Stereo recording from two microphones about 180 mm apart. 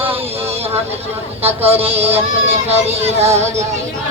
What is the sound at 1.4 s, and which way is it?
Speech, 10° right (ahead or behind).